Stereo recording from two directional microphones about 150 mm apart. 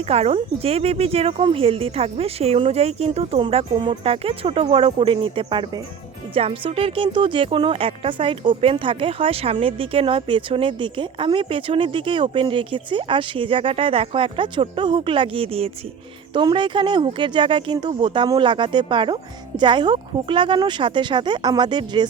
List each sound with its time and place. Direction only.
0.0 s speech: 45° right (ahead or behind)